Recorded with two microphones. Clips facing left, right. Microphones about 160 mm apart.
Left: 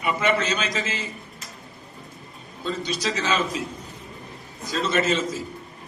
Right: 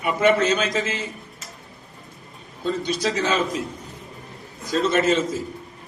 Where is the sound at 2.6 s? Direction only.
55° right (ahead or behind).